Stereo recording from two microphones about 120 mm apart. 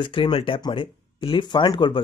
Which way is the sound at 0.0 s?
45° left (ahead or behind).